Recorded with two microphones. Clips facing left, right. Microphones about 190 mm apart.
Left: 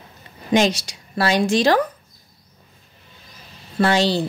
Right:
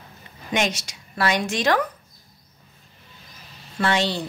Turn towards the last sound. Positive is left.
turn(degrees=35)  # may be behind; listen again after turning